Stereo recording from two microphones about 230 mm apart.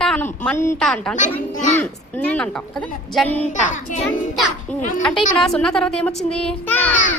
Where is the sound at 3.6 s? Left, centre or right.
Left.